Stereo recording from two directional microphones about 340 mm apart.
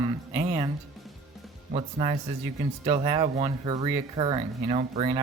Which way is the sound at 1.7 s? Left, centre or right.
Centre.